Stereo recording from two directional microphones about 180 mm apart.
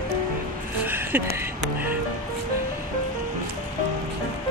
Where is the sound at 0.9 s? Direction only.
10° right (ahead or behind).